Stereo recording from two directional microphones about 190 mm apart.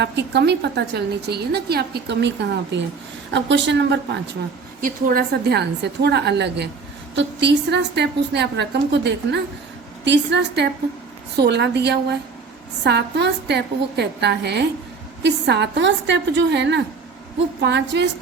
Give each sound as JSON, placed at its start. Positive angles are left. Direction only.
{"t": 0.0, "sound": "a woman's voice", "side_deg": -60}
{"t": 4.8, "sound": "a woman's voice", "side_deg": -50}